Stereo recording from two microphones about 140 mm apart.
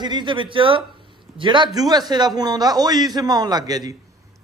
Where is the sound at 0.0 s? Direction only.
35° right (ahead or behind).